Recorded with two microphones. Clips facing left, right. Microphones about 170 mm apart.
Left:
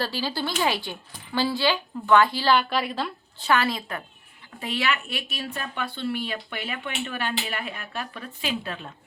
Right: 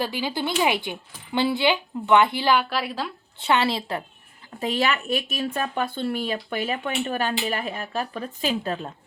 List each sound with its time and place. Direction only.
0.0 s a woman's voice: 15° right (ahead or behind)
3.4 s a woman's voice: 25° right (ahead or behind)
4.6 s speech: 40° right (ahead or behind)